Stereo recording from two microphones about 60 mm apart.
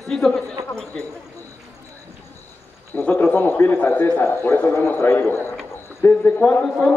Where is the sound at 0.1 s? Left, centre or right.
Centre.